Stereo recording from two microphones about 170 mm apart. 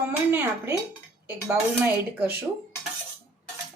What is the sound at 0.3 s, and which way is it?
Speech, 15° right (ahead or behind).